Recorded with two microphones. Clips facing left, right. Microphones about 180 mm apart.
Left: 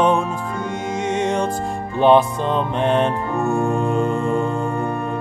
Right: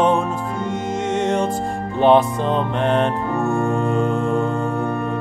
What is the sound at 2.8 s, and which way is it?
Music, 15° left (ahead or behind).